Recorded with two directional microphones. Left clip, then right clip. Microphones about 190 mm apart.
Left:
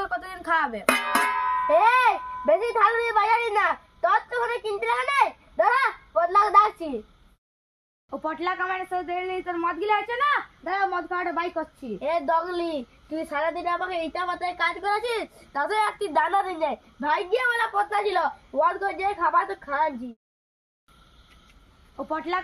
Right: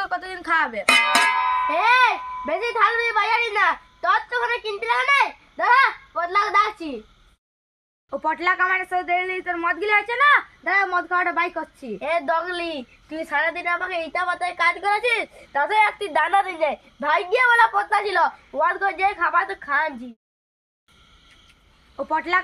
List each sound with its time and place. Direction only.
0.0 s a child's voice: 65° left (ahead or behind)
8.1 s speech: 30° left (ahead or behind)
12.4 s a woman's voice: 15° right (ahead or behind); by 15.0 s 30° right (ahead or behind)
15.0 s a woman's voice: 60° right (ahead or behind)
16.1 s a woman's voice: 30° right (ahead or behind)
21.9 s speech: 30° left (ahead or behind)